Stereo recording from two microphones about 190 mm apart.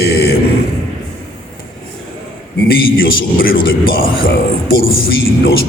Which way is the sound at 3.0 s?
50° left (ahead or behind).